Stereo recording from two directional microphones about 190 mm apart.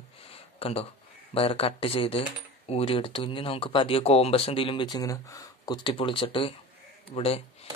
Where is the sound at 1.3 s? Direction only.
30° left (ahead or behind).